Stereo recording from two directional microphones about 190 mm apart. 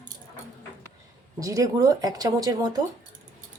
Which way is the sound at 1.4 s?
15° right (ahead or behind).